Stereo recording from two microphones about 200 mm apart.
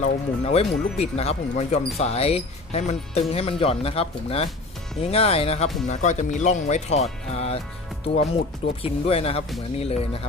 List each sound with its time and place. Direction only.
0.0 s speech: 35° left (ahead or behind)